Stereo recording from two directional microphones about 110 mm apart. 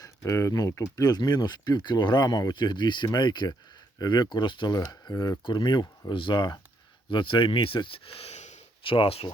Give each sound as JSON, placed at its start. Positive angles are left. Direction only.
{"t": 0.0, "sound": "speech", "side_deg": 30}
{"t": 8.8, "sound": "speech", "side_deg": 50}